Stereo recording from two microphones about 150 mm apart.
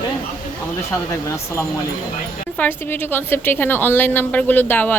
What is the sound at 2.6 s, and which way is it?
A woman's voice, 15° left (ahead or behind).